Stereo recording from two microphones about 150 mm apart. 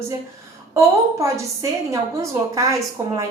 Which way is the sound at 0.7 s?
20° right (ahead or behind).